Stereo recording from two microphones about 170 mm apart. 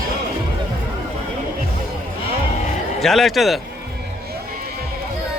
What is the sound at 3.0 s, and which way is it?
Speech, centre (ahead or behind).